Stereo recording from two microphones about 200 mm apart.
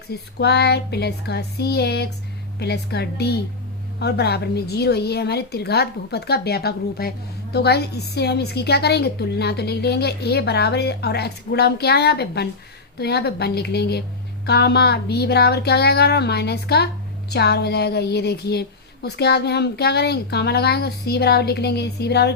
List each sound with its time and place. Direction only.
0.1 s a woman's voice: 55° left (ahead or behind)